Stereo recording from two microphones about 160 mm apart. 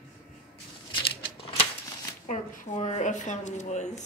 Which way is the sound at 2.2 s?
45° left (ahead or behind).